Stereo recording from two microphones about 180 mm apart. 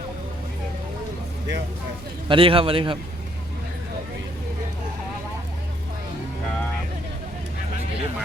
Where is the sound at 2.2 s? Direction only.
30° right (ahead or behind).